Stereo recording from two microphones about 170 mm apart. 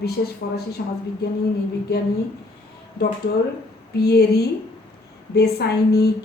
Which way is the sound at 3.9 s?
70° left (ahead or behind).